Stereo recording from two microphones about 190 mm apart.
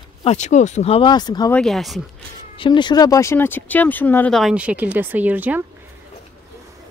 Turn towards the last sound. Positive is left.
turn(degrees=-10)  # may be behind; listen again after turning